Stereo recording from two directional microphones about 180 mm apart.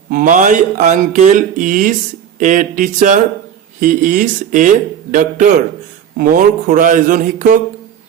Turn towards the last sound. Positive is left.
turn(degrees=-45)  # may be behind; listen again after turning